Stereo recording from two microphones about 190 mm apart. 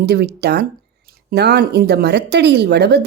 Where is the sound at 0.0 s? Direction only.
55° right (ahead or behind).